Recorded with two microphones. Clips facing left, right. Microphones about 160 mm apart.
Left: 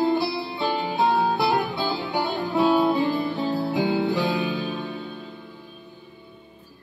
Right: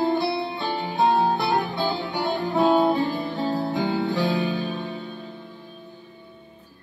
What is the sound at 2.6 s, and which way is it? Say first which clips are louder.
Music: right 1 dB; 25° right (ahead or behind).